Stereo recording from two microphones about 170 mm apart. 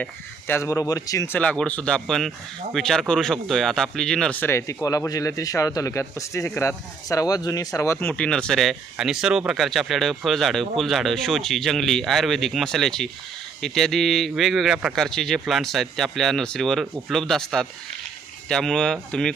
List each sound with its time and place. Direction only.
0.0 s speech: 15° left (ahead or behind)
1.4 s speech: 5° left (ahead or behind)